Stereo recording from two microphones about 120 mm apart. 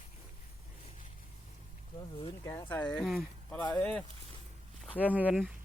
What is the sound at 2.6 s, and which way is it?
Speech, 10° left (ahead or behind).